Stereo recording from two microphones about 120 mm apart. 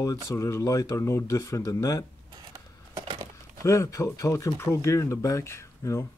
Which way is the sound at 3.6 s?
25° left (ahead or behind).